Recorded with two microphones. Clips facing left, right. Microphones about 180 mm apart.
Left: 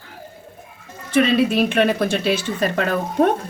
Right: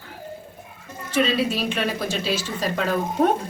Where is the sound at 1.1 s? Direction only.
55° left (ahead or behind).